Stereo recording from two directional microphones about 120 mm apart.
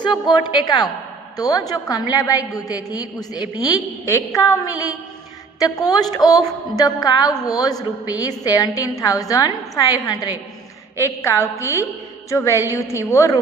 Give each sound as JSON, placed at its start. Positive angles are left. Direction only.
{"t": 0.0, "sound": "a woman's voice", "side_deg": 40}